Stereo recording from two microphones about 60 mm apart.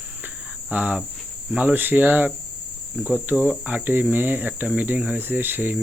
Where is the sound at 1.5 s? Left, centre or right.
Right.